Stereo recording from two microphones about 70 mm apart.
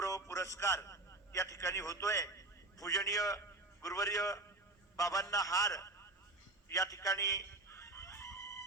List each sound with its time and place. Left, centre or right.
0.0 s a man's voice: left
6.7 s crowing: left